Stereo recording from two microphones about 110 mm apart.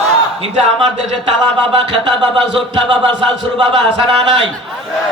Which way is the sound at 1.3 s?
55° right (ahead or behind).